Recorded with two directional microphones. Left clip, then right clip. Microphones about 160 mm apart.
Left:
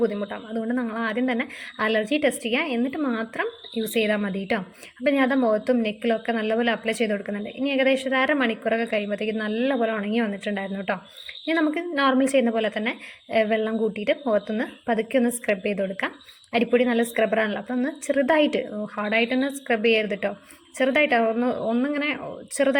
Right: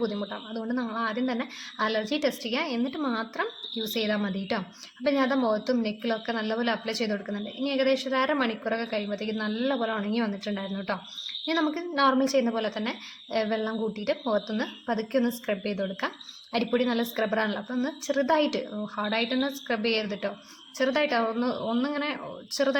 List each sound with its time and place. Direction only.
0.2 s a woman's voice: 25° left (ahead or behind)
7.1 s a woman's voice: 25° left (ahead or behind)
7.4 s a woman's voice: 15° left (ahead or behind)